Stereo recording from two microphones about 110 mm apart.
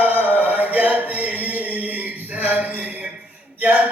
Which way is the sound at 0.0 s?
15° right (ahead or behind).